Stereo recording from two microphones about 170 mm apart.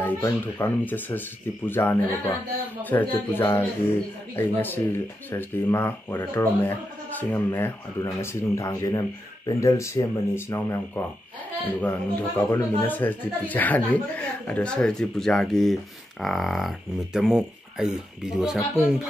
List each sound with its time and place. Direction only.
0.0 s speech: 10° left (ahead or behind); by 18.9 s 5° right (ahead or behind)